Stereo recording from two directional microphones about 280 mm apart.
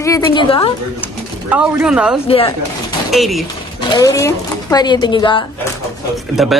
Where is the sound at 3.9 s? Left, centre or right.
Centre.